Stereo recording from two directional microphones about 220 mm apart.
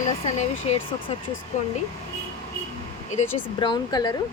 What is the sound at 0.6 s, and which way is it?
Speech, 25° left (ahead or behind).